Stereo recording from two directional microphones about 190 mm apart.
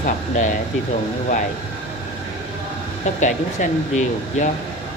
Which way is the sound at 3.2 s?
40° left (ahead or behind).